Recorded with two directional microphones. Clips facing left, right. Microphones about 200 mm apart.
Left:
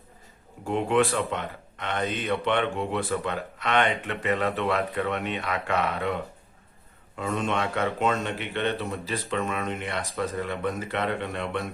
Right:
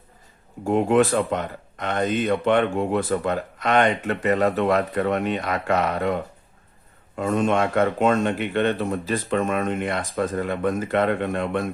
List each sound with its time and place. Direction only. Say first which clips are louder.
0.6 s speech: right 5 dB; 45° right (ahead or behind)
7.2 s speech: right 7 dB; 50° right (ahead or behind)